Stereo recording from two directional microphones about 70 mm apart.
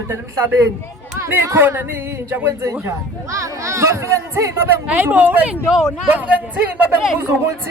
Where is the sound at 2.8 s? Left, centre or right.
Right.